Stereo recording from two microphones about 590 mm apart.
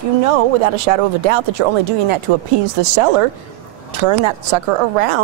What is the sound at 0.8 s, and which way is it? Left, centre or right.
A woman's voice, right.